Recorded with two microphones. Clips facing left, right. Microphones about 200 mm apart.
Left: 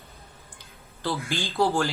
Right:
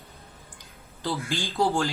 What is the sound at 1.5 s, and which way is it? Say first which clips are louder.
Speech: left 1 dB; 15° right (ahead or behind).